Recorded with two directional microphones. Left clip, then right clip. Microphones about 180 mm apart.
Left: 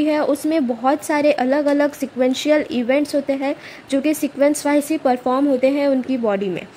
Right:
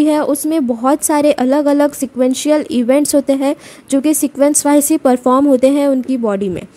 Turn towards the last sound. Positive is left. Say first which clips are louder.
# right 3 dB
turn(degrees=-35)  # may be behind; listen again after turning